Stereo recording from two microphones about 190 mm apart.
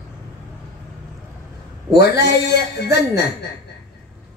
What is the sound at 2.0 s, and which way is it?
A man's voice, 60° left (ahead or behind).